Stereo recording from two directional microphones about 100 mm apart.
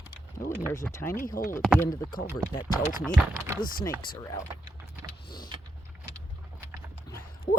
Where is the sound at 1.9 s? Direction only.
55° left (ahead or behind).